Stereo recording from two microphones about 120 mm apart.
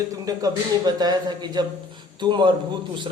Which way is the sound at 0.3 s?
35° right (ahead or behind).